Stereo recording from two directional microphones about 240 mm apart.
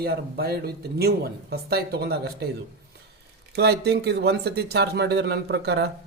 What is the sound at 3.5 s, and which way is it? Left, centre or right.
Speech, right.